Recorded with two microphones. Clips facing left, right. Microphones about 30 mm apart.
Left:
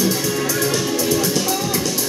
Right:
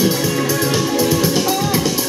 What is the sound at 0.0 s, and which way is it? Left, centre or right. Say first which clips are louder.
Music: right 3 dB; centre.